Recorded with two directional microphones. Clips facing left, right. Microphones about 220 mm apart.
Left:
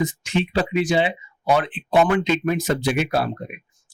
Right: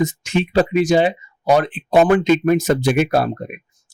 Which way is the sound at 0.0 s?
45° right (ahead or behind).